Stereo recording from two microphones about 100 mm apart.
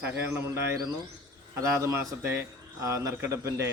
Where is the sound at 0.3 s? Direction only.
30° right (ahead or behind).